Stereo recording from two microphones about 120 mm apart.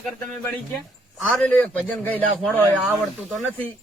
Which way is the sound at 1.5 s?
10° left (ahead or behind).